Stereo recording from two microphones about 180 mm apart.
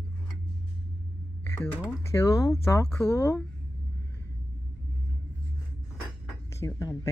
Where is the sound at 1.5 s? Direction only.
10° left (ahead or behind).